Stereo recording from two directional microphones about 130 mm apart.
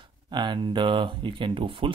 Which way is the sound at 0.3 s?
35° right (ahead or behind).